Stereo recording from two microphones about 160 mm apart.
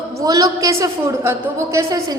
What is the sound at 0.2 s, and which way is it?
A woman's voice, 20° right (ahead or behind).